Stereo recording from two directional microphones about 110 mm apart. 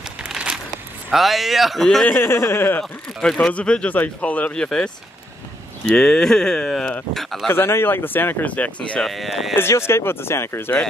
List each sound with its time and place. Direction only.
0.2 s a sound: 10° right (ahead or behind)
1.1 s speech: centre (ahead or behind)
2.0 s speech: 20° left (ahead or behind)
2.8 s speech: 5° left (ahead or behind)
7.5 s speech: 20° left (ahead or behind)
8.9 s speech: centre (ahead or behind)
9.6 s speech: 25° left (ahead or behind)